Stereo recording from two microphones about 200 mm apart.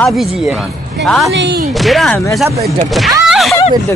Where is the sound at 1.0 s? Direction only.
Centre (ahead or behind).